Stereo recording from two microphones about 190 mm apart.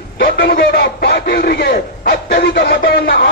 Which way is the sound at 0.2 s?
55° left (ahead or behind).